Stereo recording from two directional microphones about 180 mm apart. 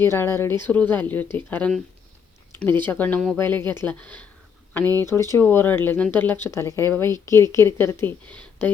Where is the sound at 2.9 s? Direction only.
10° left (ahead or behind).